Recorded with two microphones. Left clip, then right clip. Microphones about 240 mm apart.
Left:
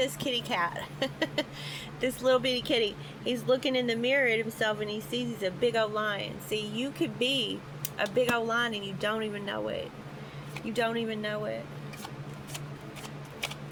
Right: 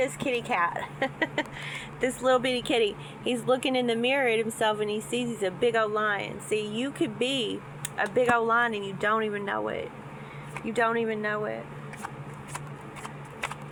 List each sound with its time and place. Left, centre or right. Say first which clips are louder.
0.0 s a woman's voice: right 2 dB; left